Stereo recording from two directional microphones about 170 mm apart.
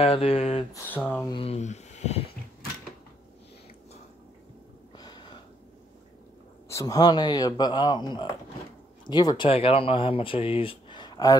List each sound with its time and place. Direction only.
0.0 s speech: 35° left (ahead or behind)
0.7 s speech: 10° left (ahead or behind)
1.2 s speech: 30° left (ahead or behind)
4.9 s a sound: 25° left (ahead or behind)
6.7 s a man's voice: 20° left (ahead or behind)